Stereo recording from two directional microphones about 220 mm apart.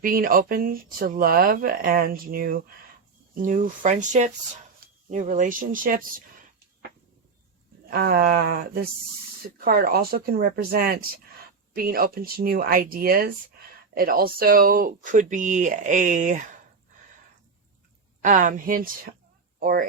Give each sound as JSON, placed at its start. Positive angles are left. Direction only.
{"t": 0.0, "sound": "speech", "side_deg": -40}
{"t": 7.9, "sound": "speech", "side_deg": -45}
{"t": 18.2, "sound": "speech", "side_deg": -35}